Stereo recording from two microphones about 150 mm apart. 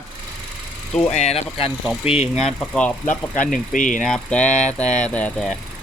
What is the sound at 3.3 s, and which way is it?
Speech, 60° left (ahead or behind).